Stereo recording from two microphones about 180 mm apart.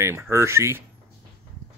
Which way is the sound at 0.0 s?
15° right (ahead or behind).